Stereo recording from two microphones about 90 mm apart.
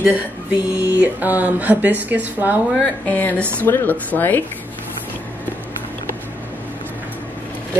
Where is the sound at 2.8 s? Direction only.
20° left (ahead or behind).